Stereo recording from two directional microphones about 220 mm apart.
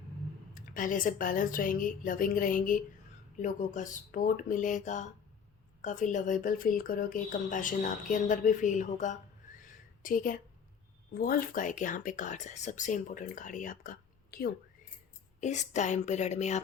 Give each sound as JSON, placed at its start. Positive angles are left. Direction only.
{"t": 0.5, "sound": "speech", "side_deg": 40}
{"t": 9.6, "sound": "a sound", "side_deg": 35}
{"t": 11.1, "sound": "speech", "side_deg": 40}